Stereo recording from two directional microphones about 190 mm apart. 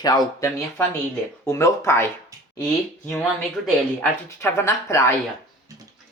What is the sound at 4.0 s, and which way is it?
Speech, 15° left (ahead or behind).